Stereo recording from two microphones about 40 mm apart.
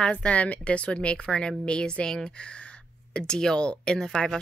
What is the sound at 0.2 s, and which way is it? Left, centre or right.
Speech, left.